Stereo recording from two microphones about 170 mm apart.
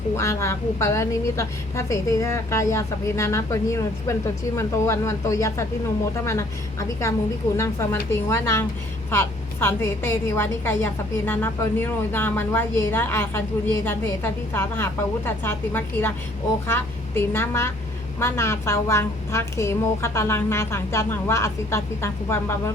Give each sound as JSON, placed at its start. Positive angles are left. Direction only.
{"t": 0.2, "sound": "a woman's voice", "side_deg": 15}
{"t": 14.5, "sound": "a woman's voice", "side_deg": 15}